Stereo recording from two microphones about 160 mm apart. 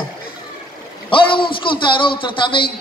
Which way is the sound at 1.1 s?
30° left (ahead or behind).